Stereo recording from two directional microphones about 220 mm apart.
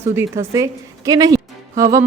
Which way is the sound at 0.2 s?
15° right (ahead or behind).